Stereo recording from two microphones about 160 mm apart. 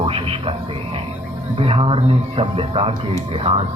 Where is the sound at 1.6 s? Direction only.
35° right (ahead or behind).